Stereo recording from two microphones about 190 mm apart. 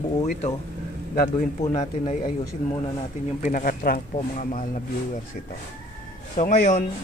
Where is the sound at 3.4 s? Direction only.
45° left (ahead or behind).